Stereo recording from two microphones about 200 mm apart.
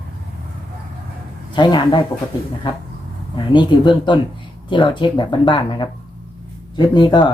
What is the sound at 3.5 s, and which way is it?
Speech, 25° left (ahead or behind).